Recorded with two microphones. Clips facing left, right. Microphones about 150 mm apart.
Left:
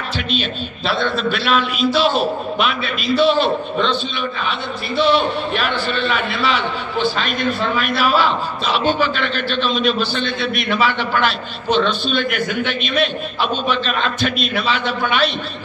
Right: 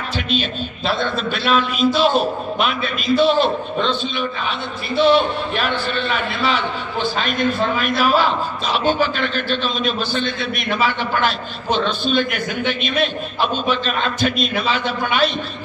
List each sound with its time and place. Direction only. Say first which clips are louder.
0.9 s a man's voice: left 5 dB; 45° right (ahead or behind)